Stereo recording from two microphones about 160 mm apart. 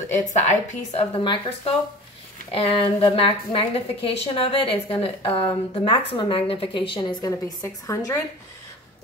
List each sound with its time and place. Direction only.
0.2 s a woman's voice: 50° left (ahead or behind)
1.2 s a woman's voice: 30° left (ahead or behind)